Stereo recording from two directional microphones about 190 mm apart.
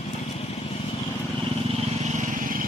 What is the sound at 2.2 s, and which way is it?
Vehicle, 45° right (ahead or behind).